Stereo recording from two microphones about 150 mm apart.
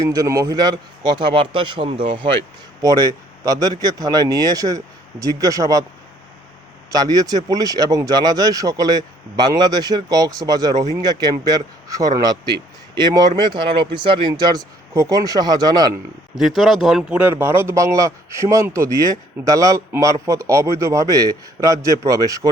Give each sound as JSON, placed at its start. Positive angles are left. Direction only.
{"t": 0.1, "sound": "a man's voice", "side_deg": -25}
{"t": 2.8, "sound": "speech", "side_deg": -25}
{"t": 6.9, "sound": "speech", "side_deg": -25}
{"t": 16.3, "sound": "speech", "side_deg": 0}